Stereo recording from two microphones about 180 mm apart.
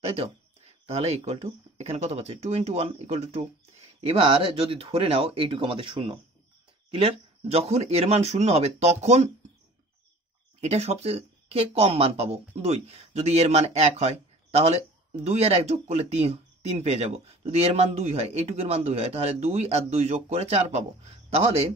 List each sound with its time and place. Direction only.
0.0 s a sound: 35° right (ahead or behind)
0.8 s speech: 35° right (ahead or behind)
10.6 s speech: 35° right (ahead or behind)